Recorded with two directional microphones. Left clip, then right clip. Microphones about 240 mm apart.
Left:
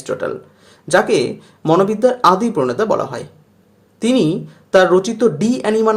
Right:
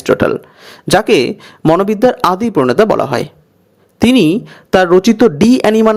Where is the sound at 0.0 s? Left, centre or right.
Right.